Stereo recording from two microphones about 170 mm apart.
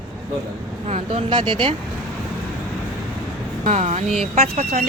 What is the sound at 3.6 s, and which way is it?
Speech, 40° right (ahead or behind).